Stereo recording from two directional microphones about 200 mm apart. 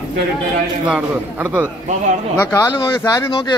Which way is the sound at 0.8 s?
5° right (ahead or behind).